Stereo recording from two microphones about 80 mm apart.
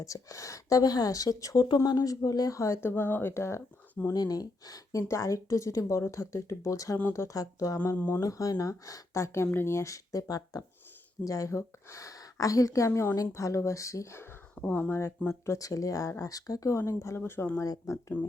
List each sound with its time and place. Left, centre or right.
0.0 s a woman's voice: left
4.1 s a woman's voice: left
14.5 s speech: centre
15.4 s a woman's voice: left
16.7 s speech: left
17.6 s speech: left